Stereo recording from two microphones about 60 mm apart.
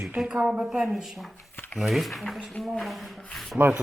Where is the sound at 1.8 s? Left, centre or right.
Centre.